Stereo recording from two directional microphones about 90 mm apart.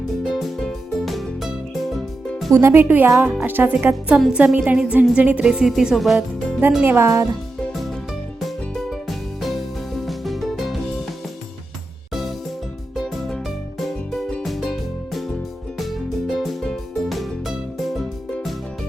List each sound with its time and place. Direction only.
0.2 s music: 5° left (ahead or behind)
2.5 s a woman's voice: 30° right (ahead or behind); by 6.1 s centre (ahead or behind)
6.8 s speech: 30° right (ahead or behind)
8.4 s music: centre (ahead or behind)
13.0 s music: centre (ahead or behind)